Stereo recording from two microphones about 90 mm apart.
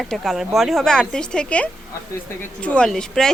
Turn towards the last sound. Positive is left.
turn(degrees=5)  # may be behind; listen again after turning